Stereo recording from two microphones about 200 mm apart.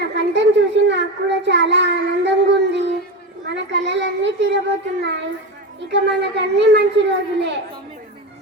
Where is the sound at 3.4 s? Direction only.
60° right (ahead or behind).